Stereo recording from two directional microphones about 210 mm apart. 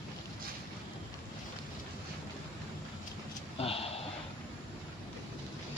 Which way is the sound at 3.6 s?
25° left (ahead or behind).